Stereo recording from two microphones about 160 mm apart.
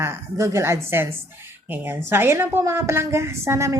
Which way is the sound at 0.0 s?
20° right (ahead or behind).